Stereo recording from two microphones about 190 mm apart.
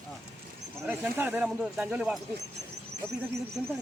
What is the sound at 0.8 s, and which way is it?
Speech, 10° right (ahead or behind).